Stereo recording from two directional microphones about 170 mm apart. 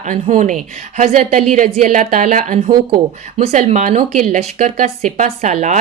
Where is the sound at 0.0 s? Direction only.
50° right (ahead or behind).